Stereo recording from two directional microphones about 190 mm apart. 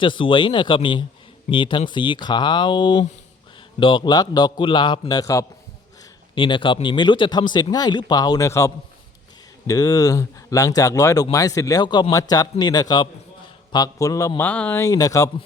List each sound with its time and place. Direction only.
0.0 s a man's voice: 25° left (ahead or behind)